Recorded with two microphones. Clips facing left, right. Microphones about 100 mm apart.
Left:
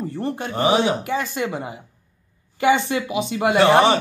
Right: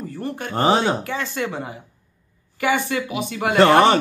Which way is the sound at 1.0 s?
15° left (ahead or behind).